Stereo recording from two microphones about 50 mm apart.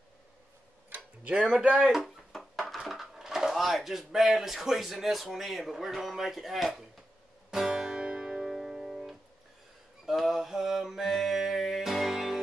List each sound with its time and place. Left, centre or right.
1.2 s speech: right
2.3 s a sound: centre
2.9 s speech: centre
7.5 s music: centre
10.0 s mantra: centre